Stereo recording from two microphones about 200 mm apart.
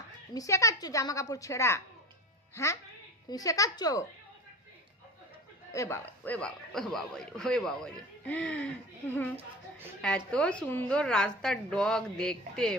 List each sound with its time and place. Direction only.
0.3 s a woman's voice: 15° left (ahead or behind)
5.7 s a man's voice: 15° left (ahead or behind)